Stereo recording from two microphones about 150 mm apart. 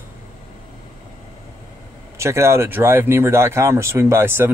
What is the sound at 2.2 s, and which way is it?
A man's voice, 20° right (ahead or behind).